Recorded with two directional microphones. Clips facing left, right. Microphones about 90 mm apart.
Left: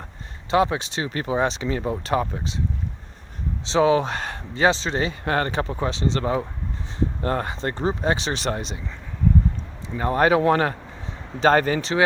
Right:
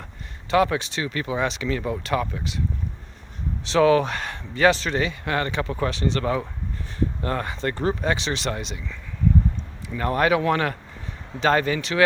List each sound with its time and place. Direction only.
0.5 s speech: 25° left (ahead or behind)
3.7 s speech: 25° left (ahead or behind)
5.7 s speech: 25° left (ahead or behind)
8.1 s speech: 40° left (ahead or behind)